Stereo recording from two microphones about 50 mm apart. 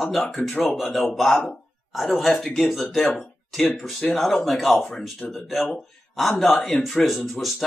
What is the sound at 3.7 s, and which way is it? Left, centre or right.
Speech, centre.